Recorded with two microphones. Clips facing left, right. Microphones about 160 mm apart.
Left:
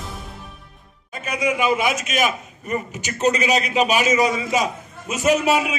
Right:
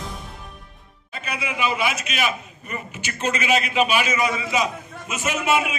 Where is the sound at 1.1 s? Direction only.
45° left (ahead or behind).